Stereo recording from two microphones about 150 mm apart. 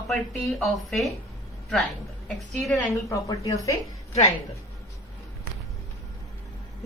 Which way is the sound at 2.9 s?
20° left (ahead or behind).